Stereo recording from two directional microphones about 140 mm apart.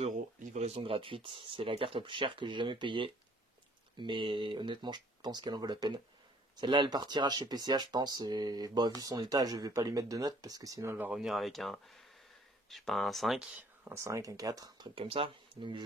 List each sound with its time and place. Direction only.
0.4 s speech: 60° right (ahead or behind); by 14.9 s 25° right (ahead or behind)
15.0 s speech: 40° right (ahead or behind)